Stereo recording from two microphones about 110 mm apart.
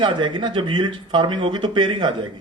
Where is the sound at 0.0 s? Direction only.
45° right (ahead or behind).